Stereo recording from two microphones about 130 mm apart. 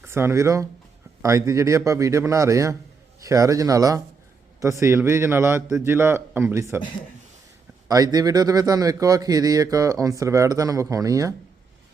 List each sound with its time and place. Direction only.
0.0 s a man's voice: 20° right (ahead or behind)
7.9 s a man's voice: 30° right (ahead or behind)